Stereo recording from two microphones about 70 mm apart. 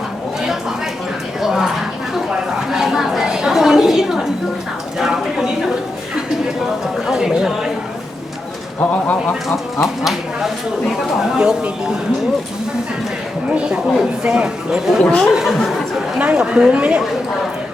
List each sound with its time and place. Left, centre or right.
1.4 s a sound: centre
7.1 s a woman's voice: centre
8.8 s speech: centre
9.8 s speech: centre
13.5 s speech: centre
15.0 s speech: centre
15.3 s speech: centre